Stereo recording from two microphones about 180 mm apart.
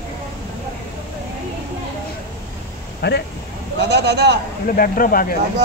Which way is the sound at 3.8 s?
70° right (ahead or behind).